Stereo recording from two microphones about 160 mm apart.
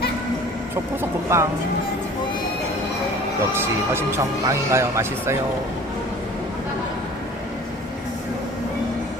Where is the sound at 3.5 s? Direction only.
15° right (ahead or behind).